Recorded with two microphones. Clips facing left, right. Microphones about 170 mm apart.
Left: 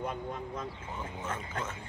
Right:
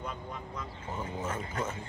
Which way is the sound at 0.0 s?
50° left (ahead or behind).